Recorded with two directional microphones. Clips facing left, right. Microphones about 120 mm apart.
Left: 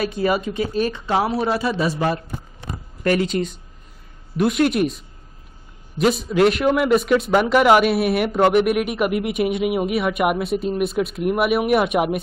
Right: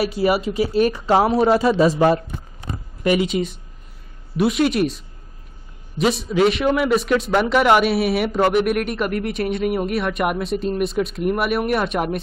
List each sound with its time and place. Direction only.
0.2 s speech: 25° right (ahead or behind)
3.0 s a man's voice: 10° right (ahead or behind); by 12.2 s 10° left (ahead or behind)